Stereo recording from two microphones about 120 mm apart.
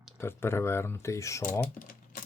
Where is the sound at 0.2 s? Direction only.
20° left (ahead or behind).